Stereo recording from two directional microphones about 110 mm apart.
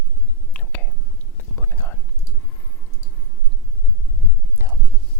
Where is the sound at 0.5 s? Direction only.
15° left (ahead or behind).